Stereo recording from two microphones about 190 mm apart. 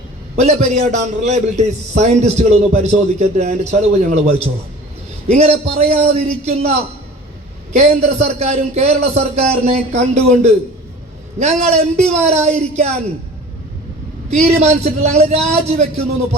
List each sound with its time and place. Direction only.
0.3 s a man's voice: 35° right (ahead or behind)
7.7 s a man's voice: 35° right (ahead or behind)
14.3 s a man's voice: 35° right (ahead or behind)